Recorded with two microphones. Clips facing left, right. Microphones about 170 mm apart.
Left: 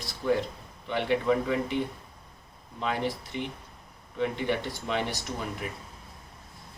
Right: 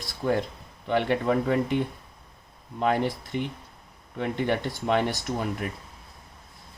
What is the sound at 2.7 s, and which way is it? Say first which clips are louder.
A man's voice: right 5 dB; 50° right (ahead or behind).